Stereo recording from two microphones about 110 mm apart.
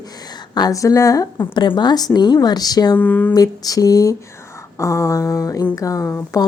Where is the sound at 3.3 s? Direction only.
35° left (ahead or behind).